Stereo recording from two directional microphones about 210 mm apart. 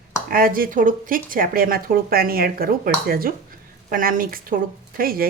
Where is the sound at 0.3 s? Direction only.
45° right (ahead or behind).